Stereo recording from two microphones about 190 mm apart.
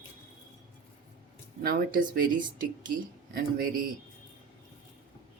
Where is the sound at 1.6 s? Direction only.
50° right (ahead or behind).